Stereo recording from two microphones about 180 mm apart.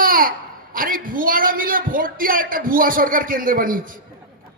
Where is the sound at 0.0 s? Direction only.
50° right (ahead or behind).